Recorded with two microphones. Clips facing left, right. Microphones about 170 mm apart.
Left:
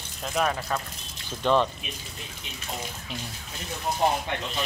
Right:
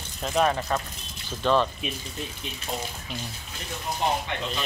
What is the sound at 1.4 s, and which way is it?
Speech, 15° left (ahead or behind).